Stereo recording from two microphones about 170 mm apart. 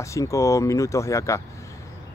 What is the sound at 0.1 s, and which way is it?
Speech, 20° left (ahead or behind).